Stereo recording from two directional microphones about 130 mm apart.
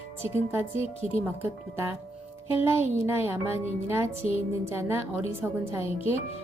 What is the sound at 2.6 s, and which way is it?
Speech, 20° right (ahead or behind).